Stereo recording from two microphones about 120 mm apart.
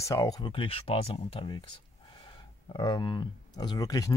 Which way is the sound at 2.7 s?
35° left (ahead or behind).